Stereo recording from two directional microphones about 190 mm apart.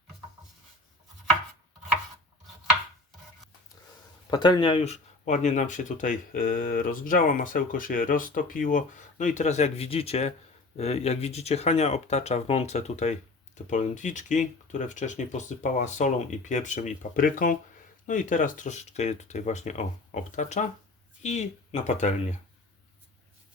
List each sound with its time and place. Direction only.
4.3 s speech: 20° left (ahead or behind); by 22.4 s 40° left (ahead or behind)